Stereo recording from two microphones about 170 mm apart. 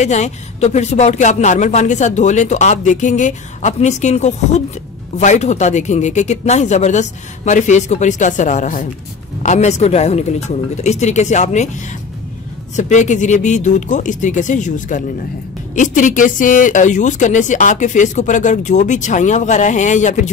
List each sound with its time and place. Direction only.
0.0 s speech: 45° left (ahead or behind)